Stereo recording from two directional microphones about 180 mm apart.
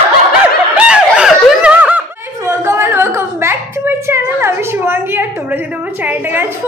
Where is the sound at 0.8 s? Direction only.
5° right (ahead or behind).